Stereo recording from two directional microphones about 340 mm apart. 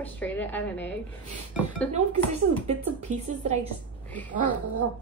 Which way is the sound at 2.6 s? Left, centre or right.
Centre.